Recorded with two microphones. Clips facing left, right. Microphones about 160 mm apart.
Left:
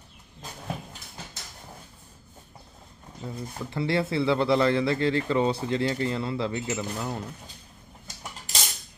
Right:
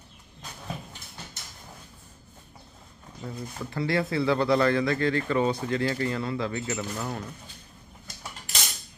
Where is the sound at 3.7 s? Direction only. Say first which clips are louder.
Left 1 dB; 25° left (ahead or behind).